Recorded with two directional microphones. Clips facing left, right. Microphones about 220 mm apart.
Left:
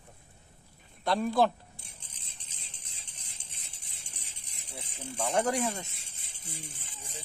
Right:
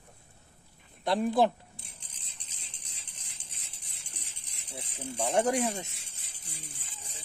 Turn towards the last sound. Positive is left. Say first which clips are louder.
# right 2 dB
turn(degrees=-20)  # may be behind; listen again after turning